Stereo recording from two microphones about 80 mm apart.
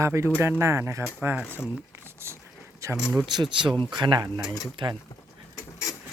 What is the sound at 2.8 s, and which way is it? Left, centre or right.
Speech, right.